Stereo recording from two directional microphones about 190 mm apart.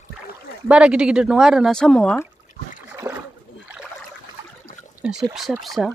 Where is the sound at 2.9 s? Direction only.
10° right (ahead or behind).